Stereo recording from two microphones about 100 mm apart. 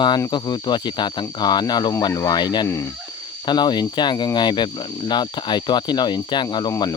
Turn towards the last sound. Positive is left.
turn(degrees=45)  # may be behind; listen again after turning